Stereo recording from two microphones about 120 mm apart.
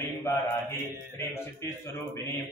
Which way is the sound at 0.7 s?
25° left (ahead or behind).